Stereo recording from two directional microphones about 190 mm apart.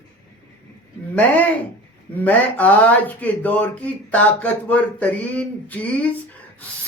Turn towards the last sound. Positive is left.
turn(degrees=5)  # may be behind; listen again after turning